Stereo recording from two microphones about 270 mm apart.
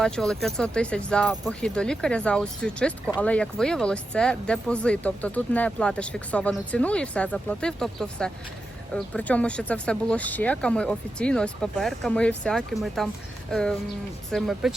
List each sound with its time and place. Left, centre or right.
0.0 s speech: centre